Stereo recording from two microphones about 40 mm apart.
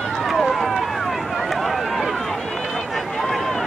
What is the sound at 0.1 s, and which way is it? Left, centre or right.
Run, centre.